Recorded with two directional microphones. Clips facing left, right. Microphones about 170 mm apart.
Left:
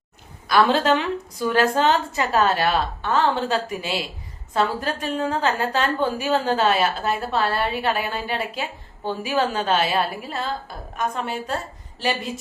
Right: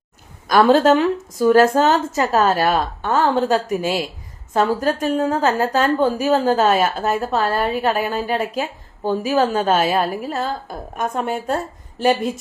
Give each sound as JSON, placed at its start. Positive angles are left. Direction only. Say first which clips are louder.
{"t": 0.4, "sound": "a woman's voice", "louder": "right 5 dB", "side_deg": -45}